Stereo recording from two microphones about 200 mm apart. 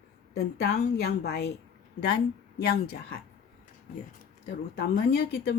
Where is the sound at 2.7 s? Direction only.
50° left (ahead or behind).